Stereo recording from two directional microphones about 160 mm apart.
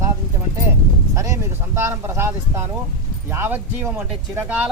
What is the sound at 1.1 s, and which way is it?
A man's voice, 20° right (ahead or behind).